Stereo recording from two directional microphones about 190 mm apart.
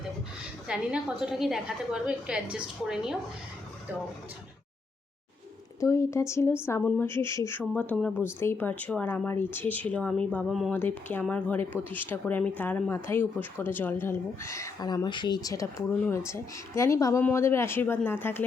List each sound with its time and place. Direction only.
0.7 s a woman's voice: 5° right (ahead or behind)
5.8 s a woman's voice: 15° left (ahead or behind)